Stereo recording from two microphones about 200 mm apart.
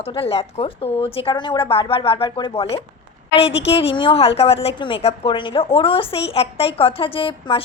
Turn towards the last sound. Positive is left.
turn(degrees=25)  # may be behind; listen again after turning